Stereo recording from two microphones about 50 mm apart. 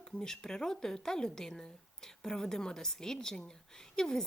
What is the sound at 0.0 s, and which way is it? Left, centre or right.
Speech, centre.